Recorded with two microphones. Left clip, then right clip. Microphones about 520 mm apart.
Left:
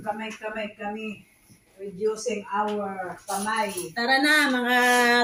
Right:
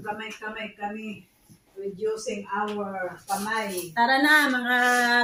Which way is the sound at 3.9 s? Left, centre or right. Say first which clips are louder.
Right 2 dB; right.